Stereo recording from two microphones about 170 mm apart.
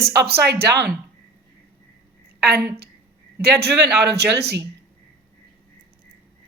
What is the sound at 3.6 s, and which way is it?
Speech, 75° right (ahead or behind).